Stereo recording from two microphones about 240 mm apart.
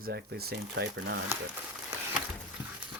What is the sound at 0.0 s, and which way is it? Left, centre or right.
Speech, right.